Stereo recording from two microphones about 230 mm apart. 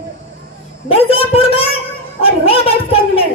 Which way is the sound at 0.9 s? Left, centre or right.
Left.